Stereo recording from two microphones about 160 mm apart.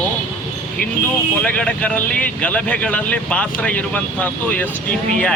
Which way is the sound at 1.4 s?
5° left (ahead or behind).